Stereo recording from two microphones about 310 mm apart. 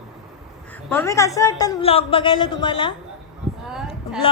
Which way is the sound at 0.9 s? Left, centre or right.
Centre.